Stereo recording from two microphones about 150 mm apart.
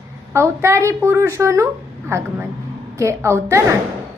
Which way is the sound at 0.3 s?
20° right (ahead or behind).